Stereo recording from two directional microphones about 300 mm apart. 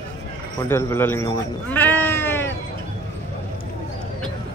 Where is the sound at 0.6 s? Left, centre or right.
Centre.